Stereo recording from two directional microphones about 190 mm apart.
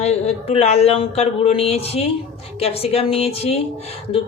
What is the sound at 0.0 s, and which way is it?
Speech, 35° left (ahead or behind).